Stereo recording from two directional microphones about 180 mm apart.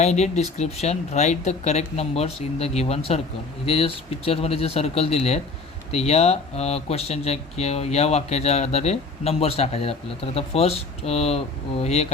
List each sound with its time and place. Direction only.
0.0 s speech: 40° left (ahead or behind)